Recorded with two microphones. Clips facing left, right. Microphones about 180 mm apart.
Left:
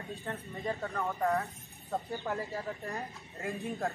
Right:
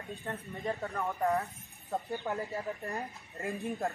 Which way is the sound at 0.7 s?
Centre (ahead or behind).